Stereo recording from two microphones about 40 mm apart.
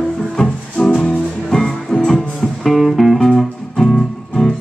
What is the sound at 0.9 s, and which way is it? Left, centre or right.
Music, left.